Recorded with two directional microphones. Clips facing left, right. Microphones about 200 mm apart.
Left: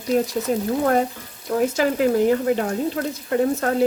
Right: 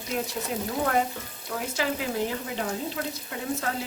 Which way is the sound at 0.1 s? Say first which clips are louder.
Left 10 dB; 40° left (ahead or behind).